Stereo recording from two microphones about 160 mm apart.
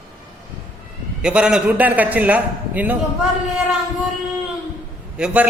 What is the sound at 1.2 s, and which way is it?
A man's voice, 5° right (ahead or behind).